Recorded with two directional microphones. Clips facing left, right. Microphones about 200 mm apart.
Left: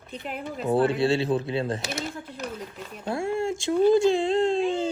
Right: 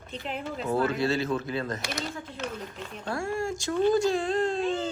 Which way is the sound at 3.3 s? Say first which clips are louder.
Left 5 dB; 25° left (ahead or behind).